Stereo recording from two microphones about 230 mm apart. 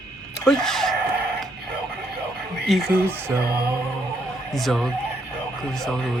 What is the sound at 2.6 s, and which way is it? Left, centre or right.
Speech, centre.